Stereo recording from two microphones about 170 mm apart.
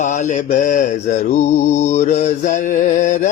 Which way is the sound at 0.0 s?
45° left (ahead or behind).